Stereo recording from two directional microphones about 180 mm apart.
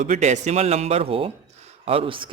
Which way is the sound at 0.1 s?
40° right (ahead or behind).